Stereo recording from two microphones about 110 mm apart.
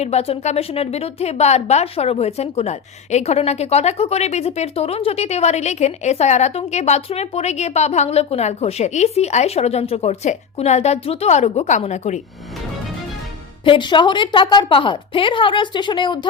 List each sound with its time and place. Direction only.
0.0 s a woman's voice: 70° left (ahead or behind); by 12.2 s 90° left
13.7 s a woman's voice: 45° left (ahead or behind)